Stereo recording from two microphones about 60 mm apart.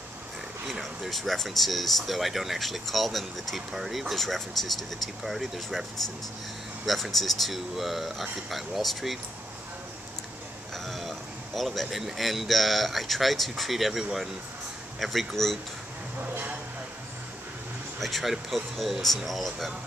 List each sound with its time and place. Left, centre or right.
0.7 s speech: centre
10.9 s speech: centre
16.2 s speech: right
18.0 s speech: centre